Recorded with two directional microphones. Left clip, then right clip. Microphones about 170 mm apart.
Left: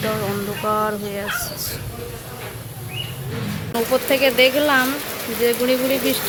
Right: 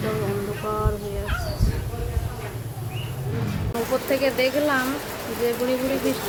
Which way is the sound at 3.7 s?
10° left (ahead or behind).